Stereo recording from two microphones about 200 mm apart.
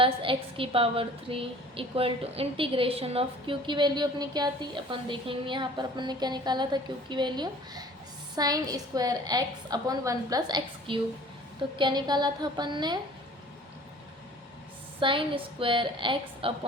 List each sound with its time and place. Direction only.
0.0 s a woman's voice: 25° right (ahead or behind)
15.0 s a woman's voice: 25° right (ahead or behind)